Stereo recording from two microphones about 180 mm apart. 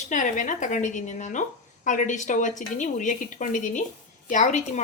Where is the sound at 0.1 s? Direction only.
45° left (ahead or behind).